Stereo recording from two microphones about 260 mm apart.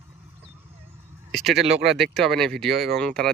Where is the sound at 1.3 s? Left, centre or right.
Centre.